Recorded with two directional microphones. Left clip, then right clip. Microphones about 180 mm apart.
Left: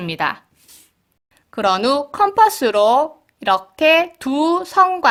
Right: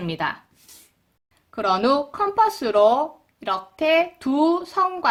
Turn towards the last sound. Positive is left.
turn(degrees=50)  # may be behind; listen again after turning